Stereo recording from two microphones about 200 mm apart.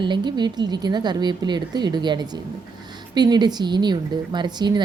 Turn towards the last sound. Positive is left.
turn(degrees=-20)  # may be behind; listen again after turning